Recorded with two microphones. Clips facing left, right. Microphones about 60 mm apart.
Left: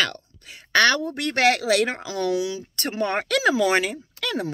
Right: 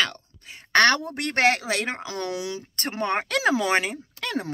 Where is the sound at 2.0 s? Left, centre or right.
Right.